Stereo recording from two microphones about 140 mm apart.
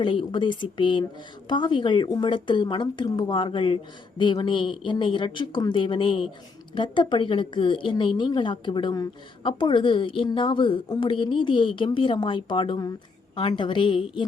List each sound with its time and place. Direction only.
0.0 s a woman's voice: 35° left (ahead or behind)